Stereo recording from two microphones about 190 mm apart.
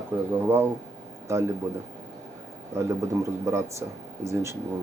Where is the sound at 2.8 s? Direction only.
15° right (ahead or behind).